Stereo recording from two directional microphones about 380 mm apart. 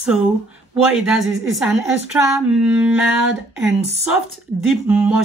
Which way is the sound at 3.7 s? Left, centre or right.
Centre.